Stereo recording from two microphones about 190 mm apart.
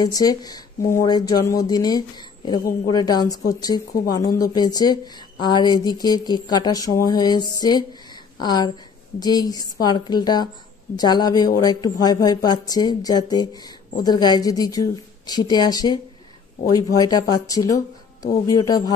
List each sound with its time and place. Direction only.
0.0 s speech: 20° left (ahead or behind)